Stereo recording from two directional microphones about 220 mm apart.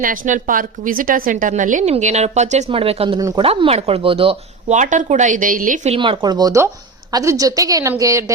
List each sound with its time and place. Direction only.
0.0 s a woman's voice: 35° right (ahead or behind)
3.2 s a woman's voice: 15° right (ahead or behind)
3.4 s a woman's voice: 25° right (ahead or behind)